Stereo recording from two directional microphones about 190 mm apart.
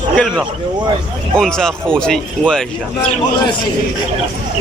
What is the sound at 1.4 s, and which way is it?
Speech, 5° left (ahead or behind).